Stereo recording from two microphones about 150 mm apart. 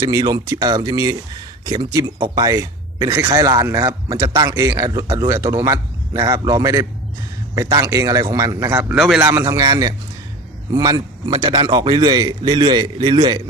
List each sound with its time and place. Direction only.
0.0 s a man's voice: 25° right (ahead or behind)